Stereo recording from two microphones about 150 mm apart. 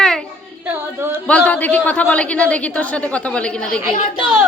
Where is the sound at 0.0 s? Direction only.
5° left (ahead or behind).